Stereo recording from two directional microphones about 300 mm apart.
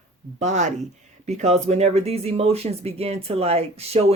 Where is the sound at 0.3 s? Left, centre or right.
Right.